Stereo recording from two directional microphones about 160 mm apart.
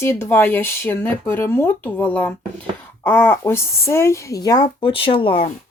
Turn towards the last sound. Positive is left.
turn(degrees=35)  # may be behind; listen again after turning